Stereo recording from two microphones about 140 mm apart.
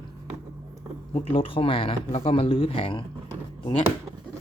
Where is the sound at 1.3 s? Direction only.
40° left (ahead or behind).